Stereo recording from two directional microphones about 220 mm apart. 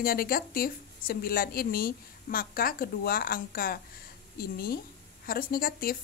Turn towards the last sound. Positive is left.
turn(degrees=40)  # may be behind; listen again after turning